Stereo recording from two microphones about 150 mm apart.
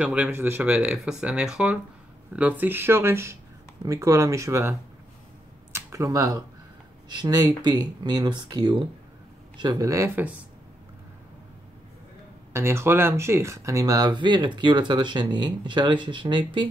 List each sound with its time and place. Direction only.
0.0 s speech: 10° right (ahead or behind)
5.7 s a sound: 15° right (ahead or behind)
7.1 s speech: 25° right (ahead or behind)
12.5 s speech: 15° right (ahead or behind)